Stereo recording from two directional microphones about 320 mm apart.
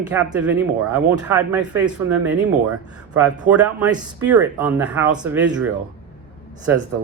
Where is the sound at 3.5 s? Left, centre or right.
Centre.